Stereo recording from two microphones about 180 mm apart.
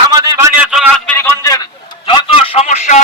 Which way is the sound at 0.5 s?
5° right (ahead or behind).